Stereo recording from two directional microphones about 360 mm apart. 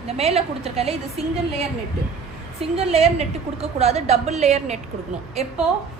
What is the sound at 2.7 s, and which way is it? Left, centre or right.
A woman's voice, centre.